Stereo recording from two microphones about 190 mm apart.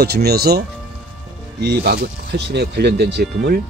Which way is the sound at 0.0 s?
55° right (ahead or behind).